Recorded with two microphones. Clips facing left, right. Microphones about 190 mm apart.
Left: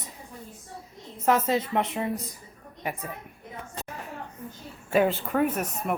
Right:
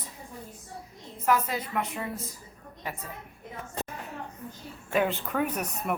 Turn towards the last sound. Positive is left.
turn(degrees=0)  # may be behind; listen again after turning